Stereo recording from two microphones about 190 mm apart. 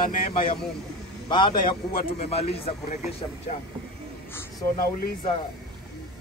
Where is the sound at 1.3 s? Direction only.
25° left (ahead or behind).